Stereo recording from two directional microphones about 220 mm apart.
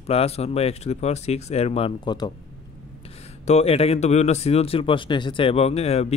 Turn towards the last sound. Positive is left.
turn(degrees=30)  # may be behind; listen again after turning